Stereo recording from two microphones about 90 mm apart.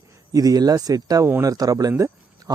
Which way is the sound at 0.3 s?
45° right (ahead or behind).